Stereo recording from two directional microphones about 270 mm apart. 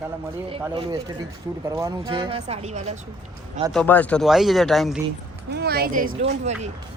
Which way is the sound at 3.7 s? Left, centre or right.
Centre.